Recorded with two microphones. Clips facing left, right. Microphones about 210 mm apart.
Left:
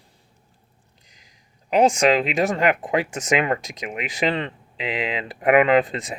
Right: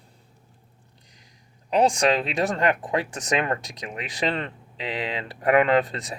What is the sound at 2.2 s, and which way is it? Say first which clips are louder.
Speech: left 3 dB; 15° left (ahead or behind).